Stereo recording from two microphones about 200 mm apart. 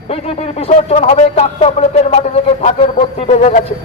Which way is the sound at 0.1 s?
30° left (ahead or behind).